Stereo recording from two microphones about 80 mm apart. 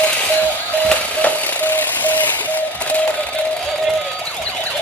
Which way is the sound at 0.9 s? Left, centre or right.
Centre.